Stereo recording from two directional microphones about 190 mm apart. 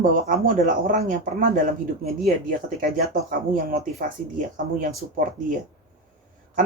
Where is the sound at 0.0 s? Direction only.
45° right (ahead or behind).